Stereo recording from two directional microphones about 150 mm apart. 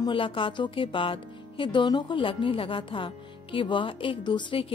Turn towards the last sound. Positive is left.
turn(degrees=35)  # may be behind; listen again after turning